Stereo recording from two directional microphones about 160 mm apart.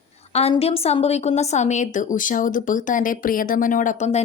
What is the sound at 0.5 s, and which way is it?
A woman's voice, 40° left (ahead or behind).